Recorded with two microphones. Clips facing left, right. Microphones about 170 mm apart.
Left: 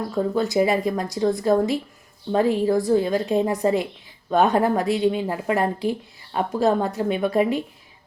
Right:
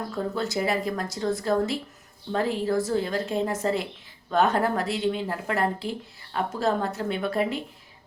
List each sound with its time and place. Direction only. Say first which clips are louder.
0.3 s speech: left 7 dB; 15° left (ahead or behind)